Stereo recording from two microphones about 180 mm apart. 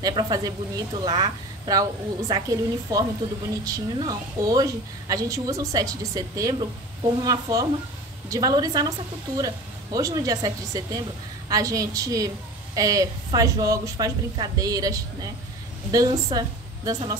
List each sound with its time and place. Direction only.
0.0 s speech: 20° right (ahead or behind)
9.9 s speech: 20° right (ahead or behind)